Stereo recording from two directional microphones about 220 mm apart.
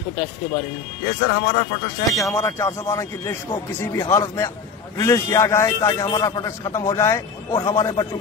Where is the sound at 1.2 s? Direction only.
30° left (ahead or behind).